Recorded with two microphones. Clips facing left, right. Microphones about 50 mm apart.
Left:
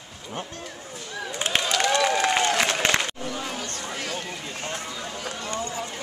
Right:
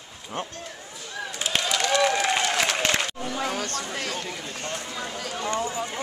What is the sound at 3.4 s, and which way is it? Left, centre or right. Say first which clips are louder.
Chatter: right 4 dB; right.